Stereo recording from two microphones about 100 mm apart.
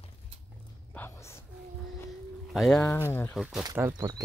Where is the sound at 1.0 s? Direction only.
25° left (ahead or behind).